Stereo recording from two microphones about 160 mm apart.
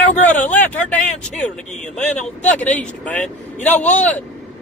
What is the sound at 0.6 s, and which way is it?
Speech, 10° left (ahead or behind).